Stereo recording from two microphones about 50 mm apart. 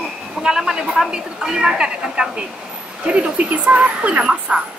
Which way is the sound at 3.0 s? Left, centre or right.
Right.